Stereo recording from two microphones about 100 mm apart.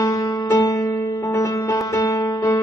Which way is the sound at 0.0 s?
35° left (ahead or behind).